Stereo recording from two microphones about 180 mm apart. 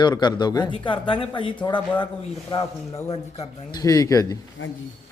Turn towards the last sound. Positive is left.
turn(degrees=20)  # may be behind; listen again after turning